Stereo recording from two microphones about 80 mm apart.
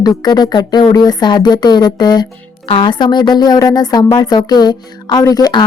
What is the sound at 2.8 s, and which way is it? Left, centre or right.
Speech, left.